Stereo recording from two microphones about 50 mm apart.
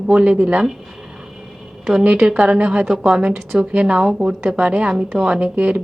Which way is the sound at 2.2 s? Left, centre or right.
Centre.